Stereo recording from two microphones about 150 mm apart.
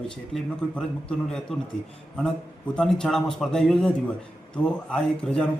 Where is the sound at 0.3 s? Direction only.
5° left (ahead or behind).